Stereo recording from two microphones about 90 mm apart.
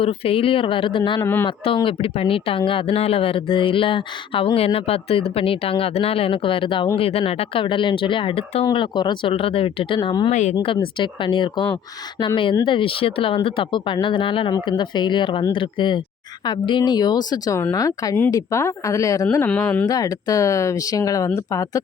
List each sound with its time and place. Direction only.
0.0 s speech: 90° left; by 6.8 s 75° left (ahead or behind)
7.0 s speech: 90° left
8.7 s speech: 60° left (ahead or behind)
9.3 s speech: 90° left
10.9 s speech: 65° left (ahead or behind)
12.2 s speech: 75° left (ahead or behind)
14.5 s speech: 55° left (ahead or behind)
17.6 s speech: 35° left (ahead or behind)
19.9 s speech: 45° left (ahead or behind)